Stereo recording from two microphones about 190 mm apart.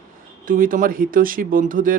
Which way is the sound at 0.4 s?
45° right (ahead or behind).